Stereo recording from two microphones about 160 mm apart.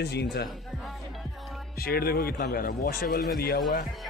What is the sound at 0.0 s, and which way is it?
Speech, 90° left.